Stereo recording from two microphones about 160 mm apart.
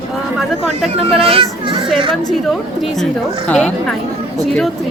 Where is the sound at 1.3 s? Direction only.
35° right (ahead or behind).